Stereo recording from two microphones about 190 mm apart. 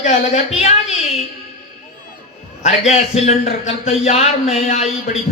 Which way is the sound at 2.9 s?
35° left (ahead or behind).